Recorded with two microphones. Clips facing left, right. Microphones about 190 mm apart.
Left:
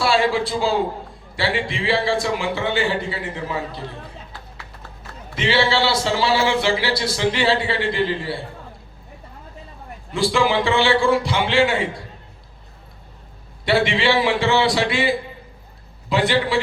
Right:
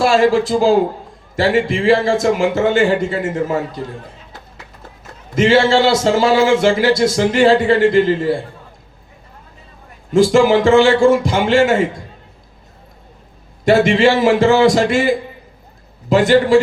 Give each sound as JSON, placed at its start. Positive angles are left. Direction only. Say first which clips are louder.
{"t": 0.0, "sound": "a man's voice", "louder": "right 6 dB", "side_deg": -45}
{"t": 5.3, "sound": "a man's voice", "louder": "right 8 dB", "side_deg": -45}
{"t": 10.1, "sound": "a man's voice", "louder": "right 9 dB", "side_deg": -45}
{"t": 13.7, "sound": "a man's voice", "louder": "right 7 dB", "side_deg": -45}